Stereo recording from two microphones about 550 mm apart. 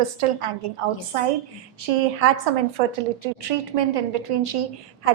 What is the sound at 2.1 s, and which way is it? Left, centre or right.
Speech, right.